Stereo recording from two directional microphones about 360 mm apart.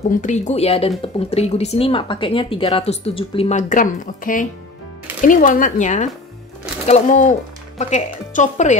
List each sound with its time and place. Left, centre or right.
0.1 s speech: left